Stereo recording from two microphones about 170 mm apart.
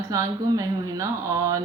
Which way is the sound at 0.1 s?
20° right (ahead or behind).